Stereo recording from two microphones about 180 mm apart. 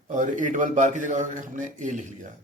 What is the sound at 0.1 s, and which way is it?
A man's voice, 45° right (ahead or behind).